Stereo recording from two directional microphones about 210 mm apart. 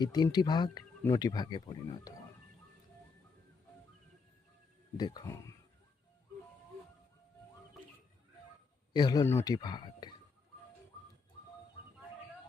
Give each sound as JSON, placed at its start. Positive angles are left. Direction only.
{"t": 0.0, "sound": "speech", "side_deg": 20}
{"t": 4.9, "sound": "speech", "side_deg": 20}
{"t": 8.9, "sound": "speech", "side_deg": 20}